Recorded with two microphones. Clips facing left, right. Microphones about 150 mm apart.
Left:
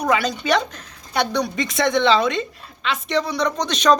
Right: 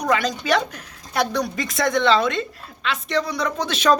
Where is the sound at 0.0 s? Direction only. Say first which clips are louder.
Left 1 dB; 5° left (ahead or behind).